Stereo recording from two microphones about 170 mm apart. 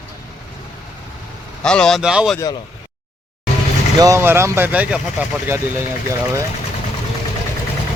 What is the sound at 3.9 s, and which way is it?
Speech, 20° right (ahead or behind).